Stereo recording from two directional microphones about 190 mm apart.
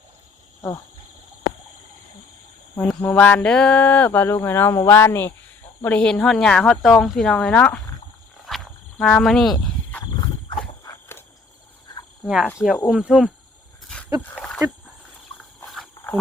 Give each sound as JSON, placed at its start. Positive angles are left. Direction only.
{"t": 2.7, "sound": "speech", "side_deg": 10}
{"t": 8.4, "sound": "cricket", "side_deg": 0}
{"t": 10.8, "sound": "walk", "side_deg": 20}
{"t": 12.2, "sound": "speech", "side_deg": 0}
{"t": 14.2, "sound": "speech", "side_deg": 10}
{"t": 15.6, "sound": "a sound", "side_deg": 0}